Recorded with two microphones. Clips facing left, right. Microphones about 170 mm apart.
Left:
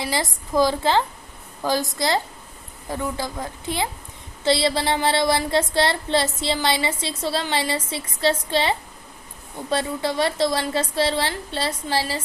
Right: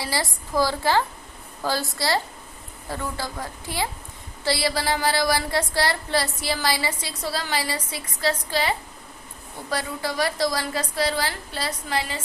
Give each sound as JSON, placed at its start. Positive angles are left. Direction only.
{"t": 0.0, "sound": "child singing", "side_deg": 20}
{"t": 2.9, "sound": "speech", "side_deg": 15}
{"t": 4.4, "sound": "child singing", "side_deg": 25}